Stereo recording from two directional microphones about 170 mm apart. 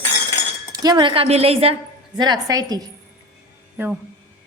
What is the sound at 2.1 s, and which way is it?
Speech, 25° right (ahead or behind).